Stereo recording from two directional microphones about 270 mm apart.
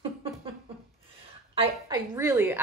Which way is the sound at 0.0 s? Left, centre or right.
Centre.